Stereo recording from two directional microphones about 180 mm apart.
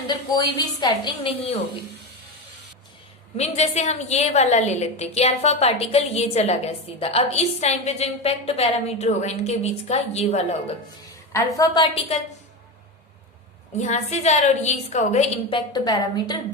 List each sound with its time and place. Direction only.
0.1 s a woman's voice: 25° left (ahead or behind)
3.3 s a woman's voice: 35° left (ahead or behind)
11.3 s a woman's voice: 20° left (ahead or behind)
13.7 s a woman's voice: 40° left (ahead or behind); by 16.4 s 25° left (ahead or behind)